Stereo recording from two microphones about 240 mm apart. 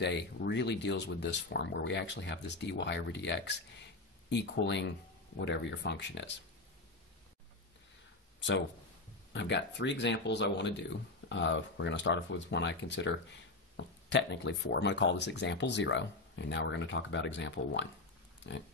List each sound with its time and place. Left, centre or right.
0.0 s speech: left
8.4 s speech: left